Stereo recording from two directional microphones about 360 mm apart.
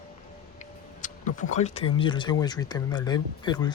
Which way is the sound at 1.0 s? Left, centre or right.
Left.